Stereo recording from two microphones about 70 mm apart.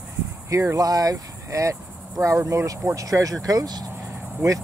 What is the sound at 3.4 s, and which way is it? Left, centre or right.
Speech, right.